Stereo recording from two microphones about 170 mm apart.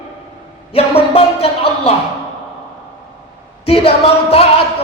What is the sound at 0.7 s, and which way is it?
Speech, 35° left (ahead or behind).